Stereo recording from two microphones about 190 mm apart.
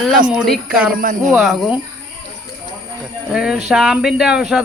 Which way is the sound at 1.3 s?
Centre (ahead or behind).